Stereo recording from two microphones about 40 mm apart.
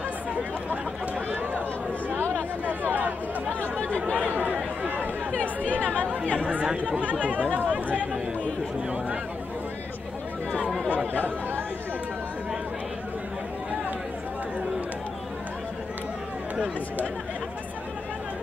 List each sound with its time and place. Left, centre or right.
2.6 s chatter: right
5.3 s speech: left
6.9 s speech: right